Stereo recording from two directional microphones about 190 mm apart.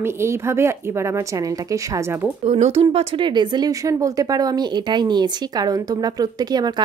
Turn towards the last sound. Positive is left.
turn(degrees=-20)  # may be behind; listen again after turning